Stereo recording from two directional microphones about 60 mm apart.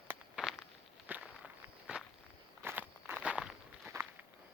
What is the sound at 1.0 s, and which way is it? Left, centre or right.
Walk, right.